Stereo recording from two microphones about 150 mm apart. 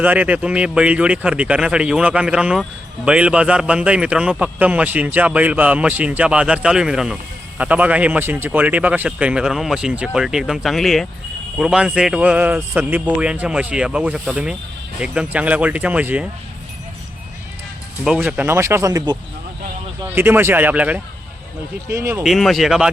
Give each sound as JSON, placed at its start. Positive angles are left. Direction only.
{"t": 0.0, "sound": "speech", "side_deg": -10}
{"t": 18.0, "sound": "speech", "side_deg": -5}
{"t": 20.1, "sound": "speech", "side_deg": -15}
{"t": 22.2, "sound": "speech", "side_deg": 0}